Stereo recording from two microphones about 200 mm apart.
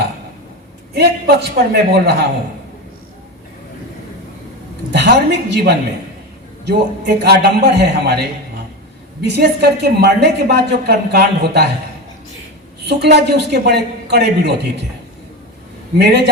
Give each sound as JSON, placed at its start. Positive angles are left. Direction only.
{"t": 0.9, "sound": "a woman's voice", "side_deg": -55}
{"t": 4.9, "sound": "a woman's voice", "side_deg": -60}
{"t": 9.2, "sound": "a woman's voice", "side_deg": -55}
{"t": 12.8, "sound": "a woman's voice", "side_deg": -55}
{"t": 16.0, "sound": "a woman's voice", "side_deg": -60}